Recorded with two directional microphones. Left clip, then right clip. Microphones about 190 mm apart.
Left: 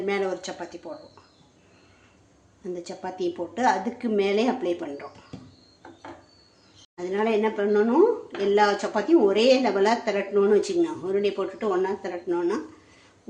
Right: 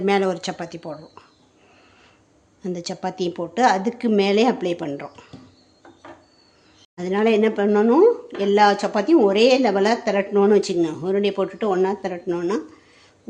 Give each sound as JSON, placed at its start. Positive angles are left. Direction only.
{"t": 0.0, "sound": "speech", "side_deg": -50}
{"t": 2.6, "sound": "speech", "side_deg": -45}
{"t": 6.9, "sound": "speech", "side_deg": -50}